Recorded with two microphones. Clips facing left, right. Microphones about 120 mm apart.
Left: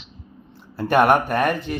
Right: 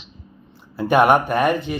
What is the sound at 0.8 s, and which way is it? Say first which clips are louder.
A man's voice: right 1 dB; centre (ahead or behind).